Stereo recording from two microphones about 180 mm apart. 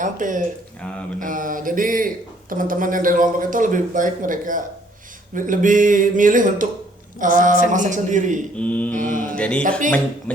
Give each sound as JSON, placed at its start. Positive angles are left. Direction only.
{"t": 0.0, "sound": "speech", "side_deg": -45}
{"t": 8.5, "sound": "mantra", "side_deg": 10}
{"t": 9.0, "sound": "speech", "side_deg": -45}
{"t": 9.4, "sound": "music", "side_deg": 5}
{"t": 10.3, "sound": "mantra", "side_deg": 5}